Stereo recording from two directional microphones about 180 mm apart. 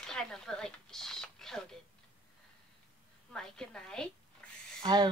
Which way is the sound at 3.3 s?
5° left (ahead or behind).